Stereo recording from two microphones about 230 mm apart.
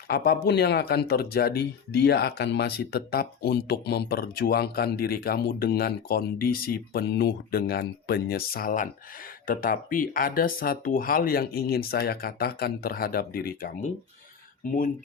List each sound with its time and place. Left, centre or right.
0.1 s speech: left